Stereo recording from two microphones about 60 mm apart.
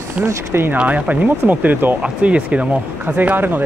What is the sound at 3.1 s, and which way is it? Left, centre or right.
Speech, right.